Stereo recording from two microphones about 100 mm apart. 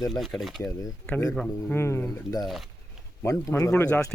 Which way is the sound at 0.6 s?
35° left (ahead or behind).